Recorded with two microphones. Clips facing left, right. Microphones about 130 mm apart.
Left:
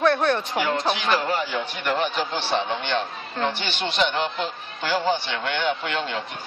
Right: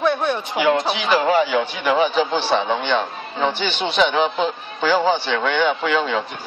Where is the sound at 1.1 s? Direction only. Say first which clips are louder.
Right 7 dB; 90° right.